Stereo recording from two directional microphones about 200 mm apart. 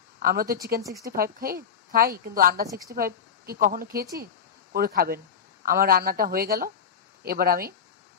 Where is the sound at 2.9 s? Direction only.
45° right (ahead or behind).